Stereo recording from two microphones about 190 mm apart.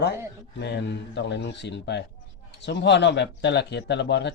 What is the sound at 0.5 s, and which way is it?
Speech, 65° left (ahead or behind).